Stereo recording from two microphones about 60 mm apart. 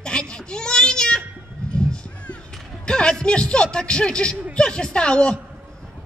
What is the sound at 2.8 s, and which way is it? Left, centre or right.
Music, centre.